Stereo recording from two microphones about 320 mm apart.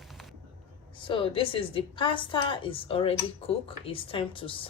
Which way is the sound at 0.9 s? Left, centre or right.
Centre.